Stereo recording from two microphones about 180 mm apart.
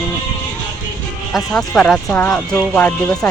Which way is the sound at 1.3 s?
5° left (ahead or behind).